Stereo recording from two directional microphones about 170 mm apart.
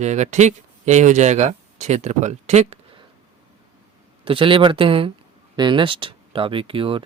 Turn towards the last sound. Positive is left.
turn(degrees=-30)  # may be behind; listen again after turning